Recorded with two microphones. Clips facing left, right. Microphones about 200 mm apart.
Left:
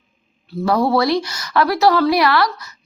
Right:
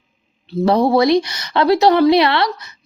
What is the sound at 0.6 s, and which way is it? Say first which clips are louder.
Speech: right 3 dB; 20° right (ahead or behind).